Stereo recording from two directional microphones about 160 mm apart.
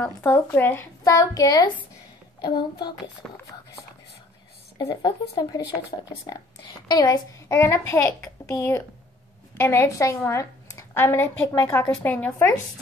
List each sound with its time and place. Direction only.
0.0 s a woman's voice: 15° left (ahead or behind)
3.2 s a woman's voice: 10° left (ahead or behind)
4.7 s a woman's voice: 30° left (ahead or behind)